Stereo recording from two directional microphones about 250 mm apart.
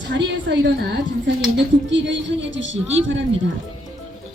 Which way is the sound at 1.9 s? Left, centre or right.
Right.